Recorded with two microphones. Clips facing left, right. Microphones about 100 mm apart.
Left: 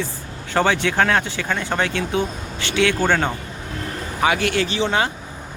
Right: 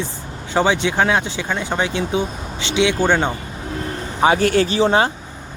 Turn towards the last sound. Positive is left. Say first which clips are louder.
# right 5 dB
turn(degrees=-35)  # may be behind; listen again after turning